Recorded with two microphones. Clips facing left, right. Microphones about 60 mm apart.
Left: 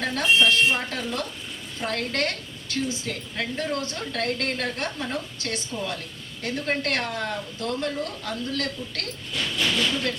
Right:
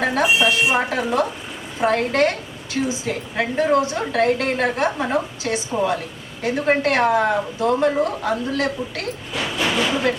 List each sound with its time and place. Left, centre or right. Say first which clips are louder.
0.0 s a woman's voice: right 4 dB; right
5.4 s a woman's voice: right 9 dB; centre